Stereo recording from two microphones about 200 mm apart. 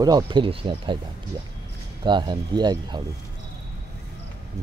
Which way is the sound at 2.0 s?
20° right (ahead or behind).